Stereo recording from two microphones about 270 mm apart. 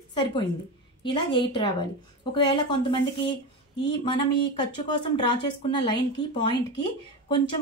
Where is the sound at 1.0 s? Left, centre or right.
Centre.